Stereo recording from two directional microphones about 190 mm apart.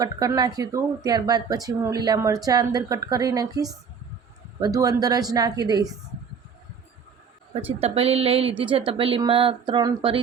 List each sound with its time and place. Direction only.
0.0 s speech: 20° right (ahead or behind)
7.5 s speech: 30° right (ahead or behind)